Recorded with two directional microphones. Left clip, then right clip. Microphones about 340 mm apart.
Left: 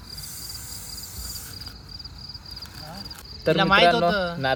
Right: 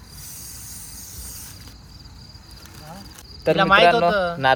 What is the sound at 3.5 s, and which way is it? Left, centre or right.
Speech, right.